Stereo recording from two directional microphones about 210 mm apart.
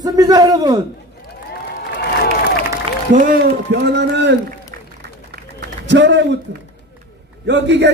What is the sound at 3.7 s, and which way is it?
Speech, 55° right (ahead or behind).